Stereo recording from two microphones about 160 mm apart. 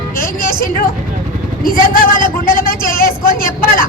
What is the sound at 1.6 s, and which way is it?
A woman's voice, 60° left (ahead or behind).